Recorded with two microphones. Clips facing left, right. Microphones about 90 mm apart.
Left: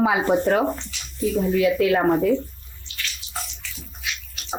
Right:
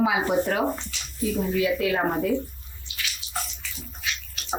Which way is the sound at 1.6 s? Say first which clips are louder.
Left 5 dB; 70° left (ahead or behind).